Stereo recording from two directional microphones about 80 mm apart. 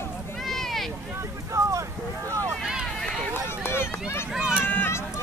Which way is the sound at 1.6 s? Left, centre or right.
Right.